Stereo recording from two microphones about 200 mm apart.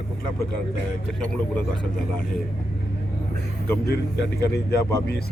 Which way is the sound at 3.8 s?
60° left (ahead or behind).